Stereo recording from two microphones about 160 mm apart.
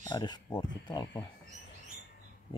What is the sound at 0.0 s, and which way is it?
Speech, 25° left (ahead or behind).